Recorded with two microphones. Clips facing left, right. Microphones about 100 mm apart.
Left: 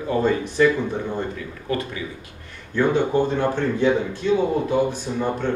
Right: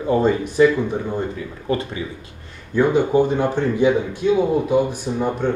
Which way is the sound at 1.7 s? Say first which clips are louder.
Right 3 dB; 25° right (ahead or behind).